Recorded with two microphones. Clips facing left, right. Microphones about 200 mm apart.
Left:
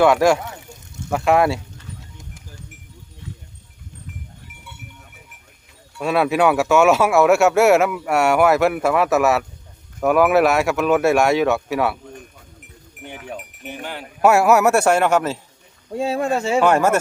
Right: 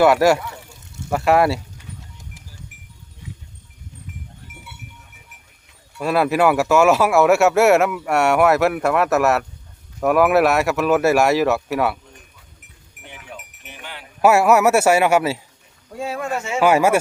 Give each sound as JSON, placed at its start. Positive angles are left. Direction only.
{"t": 0.0, "sound": "speech", "side_deg": -5}
{"t": 3.2, "sound": "a sound", "side_deg": -15}
{"t": 6.0, "sound": "speech", "side_deg": 0}
{"t": 13.1, "sound": "cowbell", "side_deg": 45}
{"t": 14.2, "sound": "speech", "side_deg": 0}
{"t": 15.9, "sound": "speech", "side_deg": 25}
{"t": 16.6, "sound": "speech", "side_deg": -5}